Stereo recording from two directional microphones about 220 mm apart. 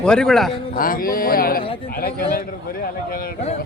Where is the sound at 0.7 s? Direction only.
40° left (ahead or behind).